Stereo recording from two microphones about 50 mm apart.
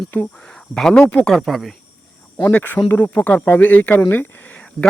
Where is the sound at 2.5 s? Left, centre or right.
Left.